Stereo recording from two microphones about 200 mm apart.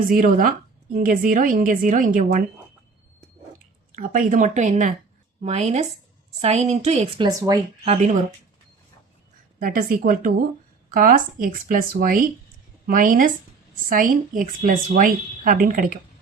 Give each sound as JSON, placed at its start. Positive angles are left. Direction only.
{"t": 0.1, "sound": "a woman's voice", "side_deg": -45}
{"t": 3.9, "sound": "speech", "side_deg": -40}
{"t": 7.3, "sound": "speech", "side_deg": -15}
{"t": 7.9, "sound": "speech", "side_deg": -35}
{"t": 9.6, "sound": "a woman's voice", "side_deg": -45}